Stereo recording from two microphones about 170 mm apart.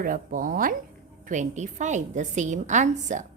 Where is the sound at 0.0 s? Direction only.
55° right (ahead or behind).